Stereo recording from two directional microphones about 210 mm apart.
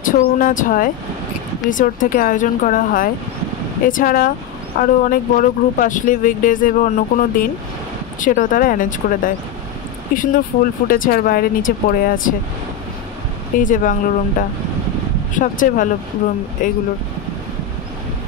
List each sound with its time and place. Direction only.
0.0 s speech: 40° left (ahead or behind)
13.6 s speech: 40° left (ahead or behind)
15.3 s speech: 40° left (ahead or behind)